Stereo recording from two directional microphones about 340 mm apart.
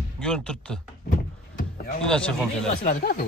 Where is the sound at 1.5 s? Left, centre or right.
Left.